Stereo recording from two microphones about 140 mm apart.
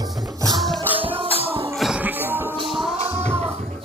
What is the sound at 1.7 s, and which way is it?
Music, 5° right (ahead or behind).